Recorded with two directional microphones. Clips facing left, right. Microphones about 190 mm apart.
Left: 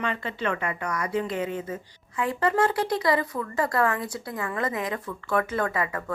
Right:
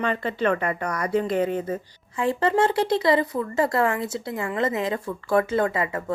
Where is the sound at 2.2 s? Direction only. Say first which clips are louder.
Right 3 dB; 25° right (ahead or behind).